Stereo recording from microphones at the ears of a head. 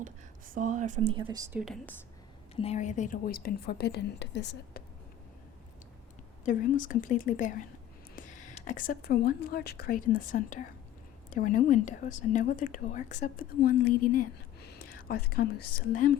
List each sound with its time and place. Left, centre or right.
0.0 s speech: right
2.6 s speech: left
6.4 s speech: left